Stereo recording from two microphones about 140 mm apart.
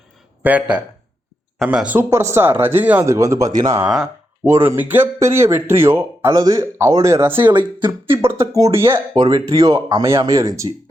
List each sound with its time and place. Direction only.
0.4 s speech: 10° right (ahead or behind)
3.8 s speech: 5° right (ahead or behind)
4.4 s speech: 15° right (ahead or behind)
7.3 s speech: 35° right (ahead or behind)
8.2 s speech: 20° right (ahead or behind)